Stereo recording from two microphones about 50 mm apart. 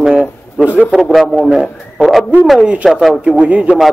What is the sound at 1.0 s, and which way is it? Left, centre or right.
Speech, centre.